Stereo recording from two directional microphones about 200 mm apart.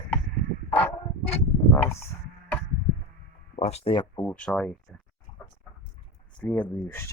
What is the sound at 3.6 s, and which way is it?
Speech, 30° left (ahead or behind).